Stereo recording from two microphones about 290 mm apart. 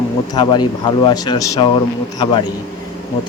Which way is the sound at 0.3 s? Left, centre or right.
Centre.